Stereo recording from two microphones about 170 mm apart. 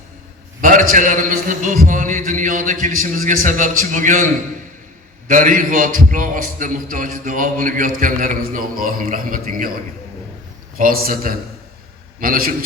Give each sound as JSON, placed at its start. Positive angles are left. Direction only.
{"t": 0.6, "sound": "a man's voice", "side_deg": -55}
{"t": 5.3, "sound": "a man's voice", "side_deg": -50}
{"t": 10.8, "sound": "a man's voice", "side_deg": -55}